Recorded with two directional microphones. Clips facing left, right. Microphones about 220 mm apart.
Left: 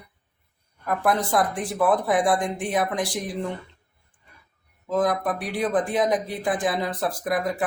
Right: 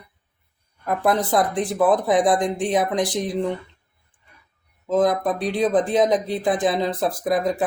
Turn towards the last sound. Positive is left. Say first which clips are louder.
# right 4 dB
turn(degrees=-20)  # may be behind; listen again after turning